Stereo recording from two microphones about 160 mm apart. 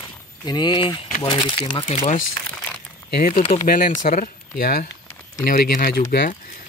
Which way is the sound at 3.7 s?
55° left (ahead or behind).